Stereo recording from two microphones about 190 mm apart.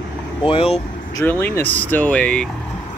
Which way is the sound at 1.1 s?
10° left (ahead or behind).